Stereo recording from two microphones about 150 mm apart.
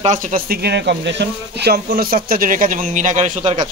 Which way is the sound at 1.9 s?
75° right (ahead or behind).